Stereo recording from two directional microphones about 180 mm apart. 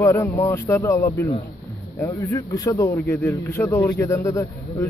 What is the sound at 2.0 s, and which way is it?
Speech, 20° left (ahead or behind).